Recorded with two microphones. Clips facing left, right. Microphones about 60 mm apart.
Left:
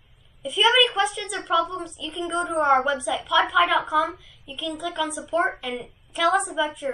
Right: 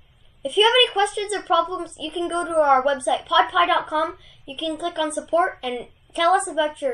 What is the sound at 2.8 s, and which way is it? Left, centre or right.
Speech, centre.